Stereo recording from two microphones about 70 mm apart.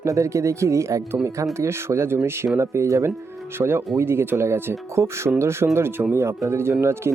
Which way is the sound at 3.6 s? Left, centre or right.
Right.